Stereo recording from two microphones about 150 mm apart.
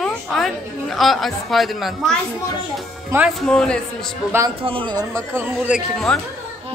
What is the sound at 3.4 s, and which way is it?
Speech, 5° left (ahead or behind).